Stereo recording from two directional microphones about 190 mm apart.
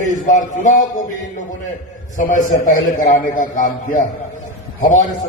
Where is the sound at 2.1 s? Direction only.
45° left (ahead or behind).